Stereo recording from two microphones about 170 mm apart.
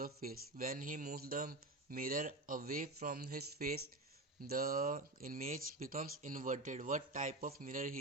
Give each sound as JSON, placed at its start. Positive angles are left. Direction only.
{"t": 0.0, "sound": "speech", "side_deg": -60}